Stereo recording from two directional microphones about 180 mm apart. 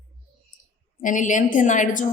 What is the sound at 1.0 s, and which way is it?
Speech, 45° left (ahead or behind).